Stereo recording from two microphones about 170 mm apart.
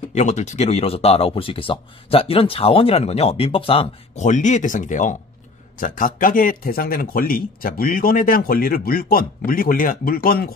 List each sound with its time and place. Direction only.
0.1 s speech: 45° left (ahead or behind); by 10.5 s 60° left (ahead or behind)